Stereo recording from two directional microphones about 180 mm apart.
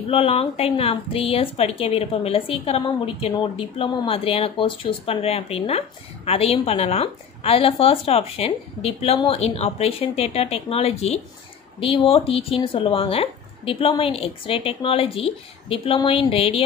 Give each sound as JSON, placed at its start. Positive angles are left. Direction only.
{"t": 0.1, "sound": "speech", "side_deg": 35}